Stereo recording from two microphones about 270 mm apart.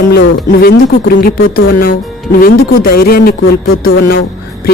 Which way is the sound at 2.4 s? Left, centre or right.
Left.